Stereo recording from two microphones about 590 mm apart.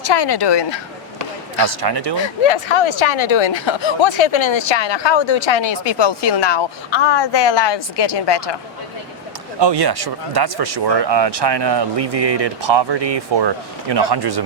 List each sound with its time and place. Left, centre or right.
0.0 s speech: left
1.6 s speech: right
2.2 s a woman's voice: left
9.6 s speech: right